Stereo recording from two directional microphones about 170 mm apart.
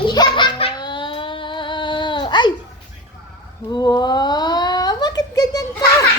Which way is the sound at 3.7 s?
25° left (ahead or behind).